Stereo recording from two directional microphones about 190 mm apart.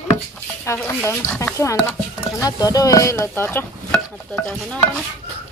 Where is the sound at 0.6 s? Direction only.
15° left (ahead or behind).